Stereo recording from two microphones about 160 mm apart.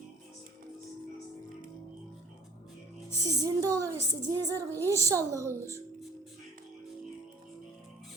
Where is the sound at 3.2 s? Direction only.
20° right (ahead or behind).